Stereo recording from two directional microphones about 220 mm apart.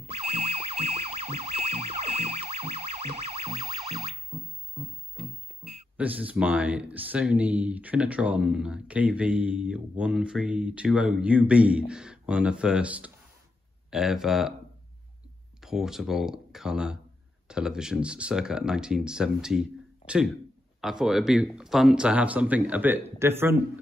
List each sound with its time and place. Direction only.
0.3 s emergency vehicle: 25° right (ahead or behind)
4.3 s music: 25° right (ahead or behind)
5.9 s speech: 5° right (ahead or behind)
15.6 s speech: centre (ahead or behind)